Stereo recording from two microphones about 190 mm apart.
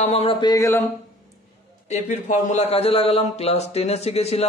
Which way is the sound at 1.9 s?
40° left (ahead or behind).